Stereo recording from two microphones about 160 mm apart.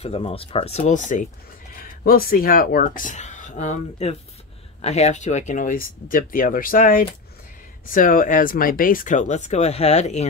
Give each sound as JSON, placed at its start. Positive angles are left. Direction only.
{"t": 0.0, "sound": "speech", "side_deg": 35}
{"t": 1.7, "sound": "speech", "side_deg": 60}